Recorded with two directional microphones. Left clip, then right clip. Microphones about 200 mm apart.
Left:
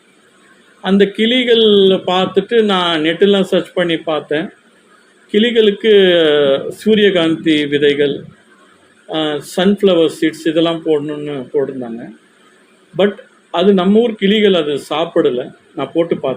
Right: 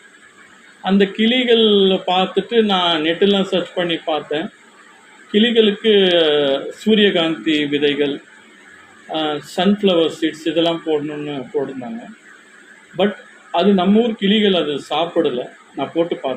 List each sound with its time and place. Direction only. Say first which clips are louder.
0.8 s speech: left 4 dB; 55° left (ahead or behind)
9.1 s speech: left 3 dB; 55° left (ahead or behind)
13.5 s speech: left 3 dB; 55° left (ahead or behind)